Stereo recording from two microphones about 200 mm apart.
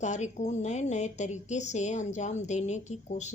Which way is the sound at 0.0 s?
35° left (ahead or behind).